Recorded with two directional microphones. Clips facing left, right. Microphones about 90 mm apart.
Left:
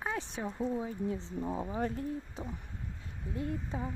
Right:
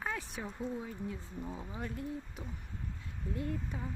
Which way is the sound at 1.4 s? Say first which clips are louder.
Left 8 dB; 40° left (ahead or behind).